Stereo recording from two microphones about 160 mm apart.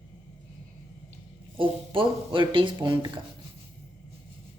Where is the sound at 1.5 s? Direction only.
35° right (ahead or behind).